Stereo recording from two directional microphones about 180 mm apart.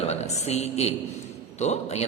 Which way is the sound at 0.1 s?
35° left (ahead or behind).